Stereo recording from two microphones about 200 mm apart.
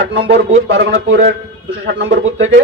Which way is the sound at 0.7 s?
70° right (ahead or behind).